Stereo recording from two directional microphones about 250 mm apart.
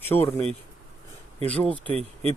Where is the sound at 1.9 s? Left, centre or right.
Right.